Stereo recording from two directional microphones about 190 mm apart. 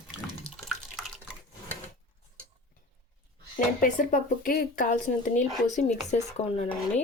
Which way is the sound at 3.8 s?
40° left (ahead or behind).